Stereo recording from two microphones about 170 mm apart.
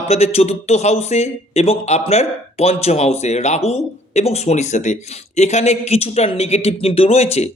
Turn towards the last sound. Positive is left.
turn(degrees=40)  # may be behind; listen again after turning